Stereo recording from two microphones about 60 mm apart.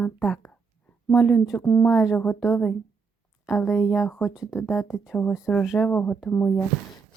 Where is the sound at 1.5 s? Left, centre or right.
Left.